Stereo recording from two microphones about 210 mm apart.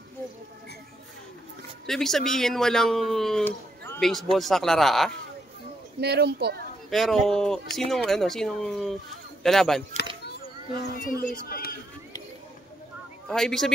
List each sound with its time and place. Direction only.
1.9 s speech: centre (ahead or behind)
5.9 s speech: 50° right (ahead or behind)
6.9 s speech: centre (ahead or behind)
10.2 s a sound: 45° left (ahead or behind)
11.4 s speech: 45° left (ahead or behind)
13.3 s speech: centre (ahead or behind)